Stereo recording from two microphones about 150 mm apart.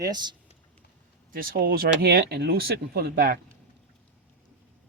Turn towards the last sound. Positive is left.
turn(degrees=-80)